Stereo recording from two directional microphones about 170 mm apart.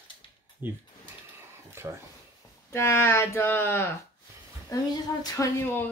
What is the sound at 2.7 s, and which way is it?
Speech, 15° left (ahead or behind).